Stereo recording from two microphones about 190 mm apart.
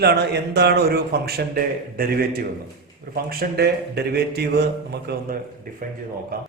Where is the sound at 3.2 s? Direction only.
55° right (ahead or behind).